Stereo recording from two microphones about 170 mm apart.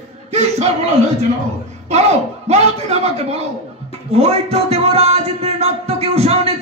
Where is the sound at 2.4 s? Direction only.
40° right (ahead or behind).